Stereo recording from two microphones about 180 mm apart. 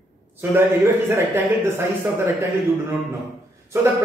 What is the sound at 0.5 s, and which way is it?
Speech, 10° right (ahead or behind).